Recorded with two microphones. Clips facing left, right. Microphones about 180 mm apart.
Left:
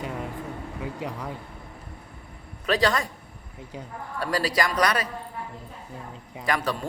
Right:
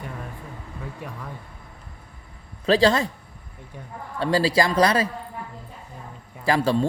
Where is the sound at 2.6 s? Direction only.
30° right (ahead or behind).